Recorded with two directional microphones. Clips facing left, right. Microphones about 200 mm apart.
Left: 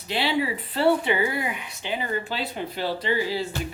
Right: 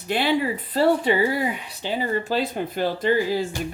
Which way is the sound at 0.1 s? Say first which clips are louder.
Right 3 dB; 50° right (ahead or behind).